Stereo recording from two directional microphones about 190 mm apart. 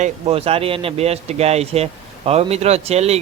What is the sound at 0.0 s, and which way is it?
Speech, 30° right (ahead or behind).